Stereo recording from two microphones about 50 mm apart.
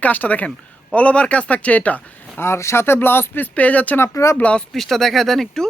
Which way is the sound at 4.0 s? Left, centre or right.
Left.